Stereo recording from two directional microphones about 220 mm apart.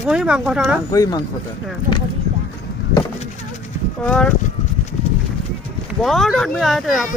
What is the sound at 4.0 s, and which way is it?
Speech, 5° left (ahead or behind).